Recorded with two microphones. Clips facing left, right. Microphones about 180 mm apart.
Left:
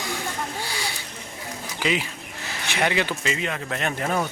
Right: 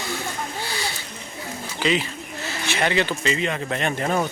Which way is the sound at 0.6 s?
10° left (ahead or behind).